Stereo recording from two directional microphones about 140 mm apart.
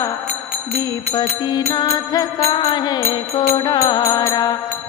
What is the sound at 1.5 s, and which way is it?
Music, 30° left (ahead or behind).